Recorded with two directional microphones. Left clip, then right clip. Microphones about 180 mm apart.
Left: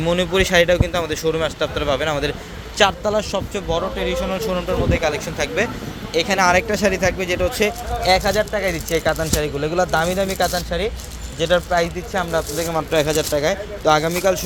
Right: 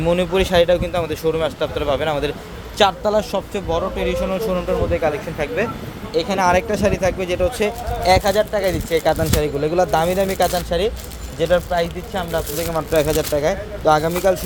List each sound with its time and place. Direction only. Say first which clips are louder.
0.0 s speech: even; 5° right (ahead or behind)
4.9 s speech: right 1 dB; 5° left (ahead or behind)
8.0 s speech: right 2 dB; 15° right (ahead or behind)
11.5 s speech: left 1 dB; 20° left (ahead or behind)
12.9 s speech: right 2 dB; centre (ahead or behind)